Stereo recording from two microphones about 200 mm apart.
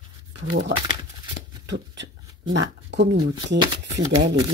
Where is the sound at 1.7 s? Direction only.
65° right (ahead or behind).